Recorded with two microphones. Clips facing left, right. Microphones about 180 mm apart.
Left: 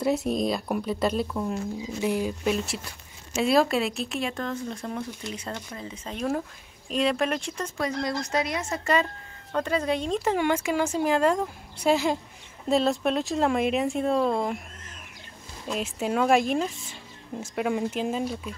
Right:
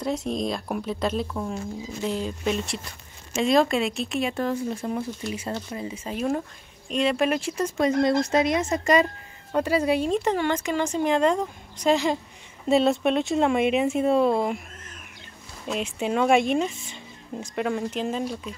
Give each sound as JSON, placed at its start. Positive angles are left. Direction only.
{"t": 0.0, "sound": "speech", "side_deg": 5}
{"t": 8.0, "sound": "speech", "side_deg": -25}
{"t": 10.3, "sound": "a woman's voice", "side_deg": 10}
{"t": 15.7, "sound": "speech", "side_deg": 0}